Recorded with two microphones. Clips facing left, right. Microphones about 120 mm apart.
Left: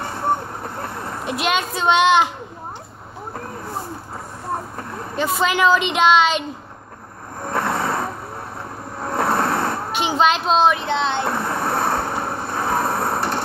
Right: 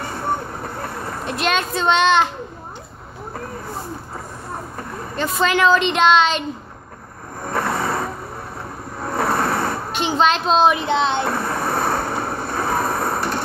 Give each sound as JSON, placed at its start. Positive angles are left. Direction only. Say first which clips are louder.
{"t": 0.8, "sound": "vehicle", "louder": "even", "side_deg": 20}
{"t": 1.3, "sound": "a woman's voice", "louder": "right 1 dB", "side_deg": 10}
{"t": 5.1, "sound": "a woman's voice", "louder": "even", "side_deg": 5}
{"t": 7.4, "sound": "vehicle", "louder": "even", "side_deg": 20}
{"t": 9.9, "sound": "a woman's voice", "louder": "even", "side_deg": 5}
{"t": 10.7, "sound": "speech", "louder": "right 2 dB", "side_deg": -10}
{"t": 11.2, "sound": "vehicle", "louder": "even", "side_deg": 20}